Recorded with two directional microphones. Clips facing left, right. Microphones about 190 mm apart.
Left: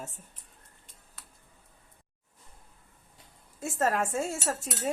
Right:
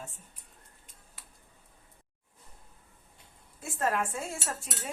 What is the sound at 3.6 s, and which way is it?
Speech, 40° left (ahead or behind).